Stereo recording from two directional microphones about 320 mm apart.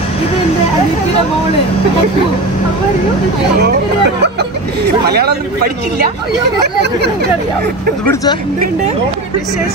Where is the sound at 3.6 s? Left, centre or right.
Right.